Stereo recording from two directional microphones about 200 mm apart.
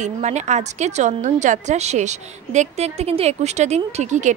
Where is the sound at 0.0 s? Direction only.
35° right (ahead or behind).